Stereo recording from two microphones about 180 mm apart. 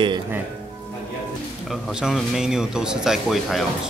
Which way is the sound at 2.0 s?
5° right (ahead or behind).